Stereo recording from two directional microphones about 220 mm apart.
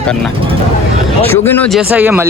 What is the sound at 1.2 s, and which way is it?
Speech, 10° left (ahead or behind).